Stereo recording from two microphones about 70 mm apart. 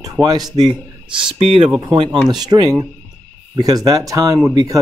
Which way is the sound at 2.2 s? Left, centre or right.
Right.